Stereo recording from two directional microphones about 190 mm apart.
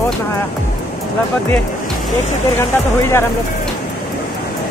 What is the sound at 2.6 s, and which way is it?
Speech, 15° left (ahead or behind).